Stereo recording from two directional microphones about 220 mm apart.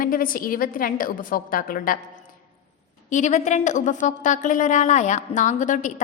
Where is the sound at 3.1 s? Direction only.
35° left (ahead or behind).